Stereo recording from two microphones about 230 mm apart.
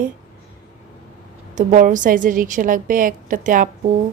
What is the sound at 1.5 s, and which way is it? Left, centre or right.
A woman's voice, right.